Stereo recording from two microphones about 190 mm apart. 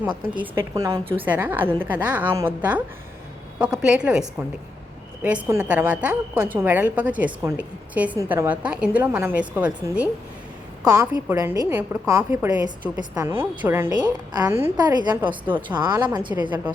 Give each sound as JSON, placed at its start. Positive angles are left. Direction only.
{"t": 0.5, "sound": "a woman's voice", "side_deg": -20}
{"t": 1.2, "sound": "a woman's voice", "side_deg": -10}
{"t": 15.5, "sound": "a woman's voice", "side_deg": -25}